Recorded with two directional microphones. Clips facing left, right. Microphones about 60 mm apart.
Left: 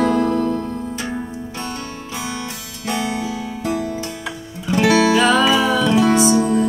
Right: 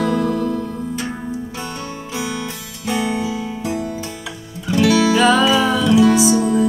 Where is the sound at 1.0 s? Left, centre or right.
Centre.